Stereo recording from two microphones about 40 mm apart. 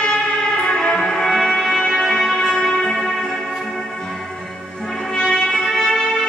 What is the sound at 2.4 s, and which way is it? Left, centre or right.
Music, centre.